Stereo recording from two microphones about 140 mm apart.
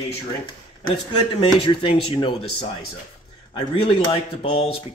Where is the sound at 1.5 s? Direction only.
40° left (ahead or behind).